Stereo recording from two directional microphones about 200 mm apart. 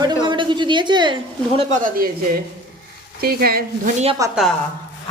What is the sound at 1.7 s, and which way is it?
Speech, 45° right (ahead or behind).